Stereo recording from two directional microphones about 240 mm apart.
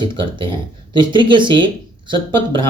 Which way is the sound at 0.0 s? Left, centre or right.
Centre.